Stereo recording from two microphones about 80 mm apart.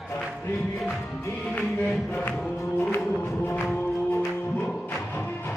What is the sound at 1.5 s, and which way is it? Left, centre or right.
Music, centre.